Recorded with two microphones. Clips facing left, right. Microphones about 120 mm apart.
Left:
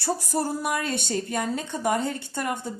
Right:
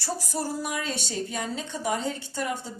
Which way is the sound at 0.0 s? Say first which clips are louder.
Left 4 dB; 55° left (ahead or behind).